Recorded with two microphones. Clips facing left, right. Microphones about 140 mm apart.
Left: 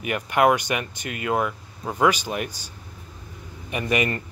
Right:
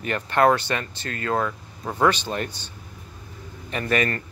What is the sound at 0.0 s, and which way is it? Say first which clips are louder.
Speech: even; 10° left (ahead or behind).